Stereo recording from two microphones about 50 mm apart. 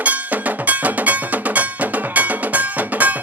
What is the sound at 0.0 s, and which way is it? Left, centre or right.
Music, right.